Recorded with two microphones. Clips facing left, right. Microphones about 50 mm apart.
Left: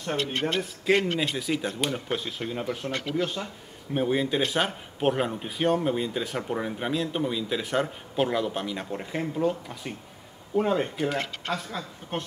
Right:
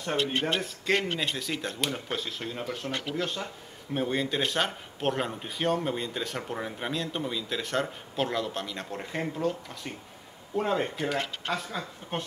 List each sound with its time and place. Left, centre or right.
0.2 s speech: right
0.6 s speech: centre